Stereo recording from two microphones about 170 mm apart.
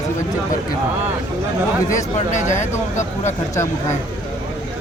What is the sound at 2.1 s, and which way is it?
Speech, 45° left (ahead or behind).